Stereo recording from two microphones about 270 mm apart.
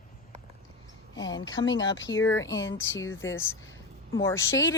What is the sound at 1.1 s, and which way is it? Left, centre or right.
A woman's voice, centre.